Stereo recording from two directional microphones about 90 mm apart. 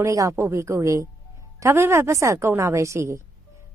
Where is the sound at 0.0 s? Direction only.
35° right (ahead or behind).